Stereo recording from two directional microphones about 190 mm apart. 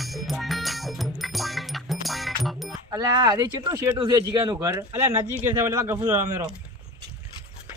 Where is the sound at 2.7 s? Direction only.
20° right (ahead or behind).